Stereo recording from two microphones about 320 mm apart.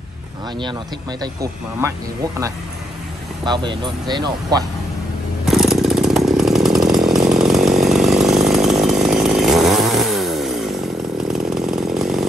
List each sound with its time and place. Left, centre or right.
1.2 s speech: centre
3.4 s speech: centre
5.5 s chainsaw: centre